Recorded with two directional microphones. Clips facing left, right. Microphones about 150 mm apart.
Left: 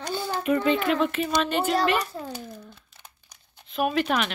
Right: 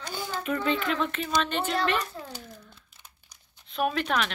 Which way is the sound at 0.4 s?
10° left (ahead or behind).